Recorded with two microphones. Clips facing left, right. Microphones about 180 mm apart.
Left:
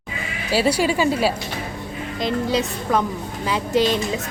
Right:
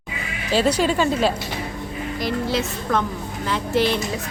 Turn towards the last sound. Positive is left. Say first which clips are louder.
# left 1 dB
turn(degrees=15)  # may be behind; listen again after turning